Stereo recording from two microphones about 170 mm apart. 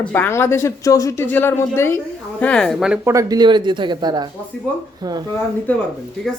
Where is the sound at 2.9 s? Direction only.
15° right (ahead or behind).